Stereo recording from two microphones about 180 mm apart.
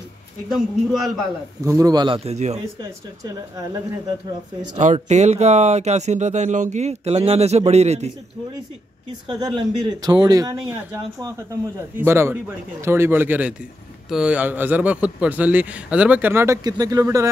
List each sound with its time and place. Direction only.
0.5 s speech: centre (ahead or behind)
1.6 s speech: 20° right (ahead or behind); by 2.6 s 40° right (ahead or behind)
4.7 s speech: 40° right (ahead or behind)
9.4 s a man's voice: 25° right (ahead or behind)